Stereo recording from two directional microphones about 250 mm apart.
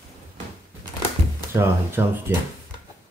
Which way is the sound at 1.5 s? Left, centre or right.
Centre.